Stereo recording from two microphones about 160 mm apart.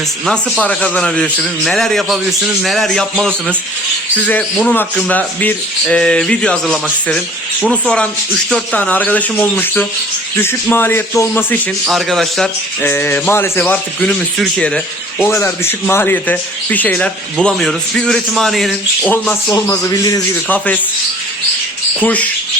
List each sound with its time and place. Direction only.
0.3 s a man's voice: 5° left (ahead or behind)
11.9 s a man's voice: centre (ahead or behind)
12.8 s a man's voice: 10° left (ahead or behind)
15.2 s a man's voice: 15° left (ahead or behind)
19.5 s a man's voice: 25° left (ahead or behind)
22.0 s a man's voice: 10° left (ahead or behind)